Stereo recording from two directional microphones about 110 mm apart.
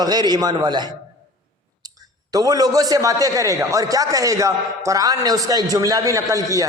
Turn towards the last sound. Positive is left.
turn(degrees=-30)  # may be behind; listen again after turning